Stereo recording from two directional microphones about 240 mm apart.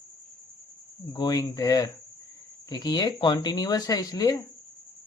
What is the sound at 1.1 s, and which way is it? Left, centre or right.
A man's voice, centre.